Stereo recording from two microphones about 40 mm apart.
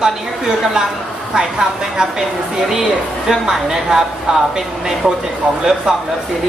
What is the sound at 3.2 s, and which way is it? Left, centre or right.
A woman's voice, centre.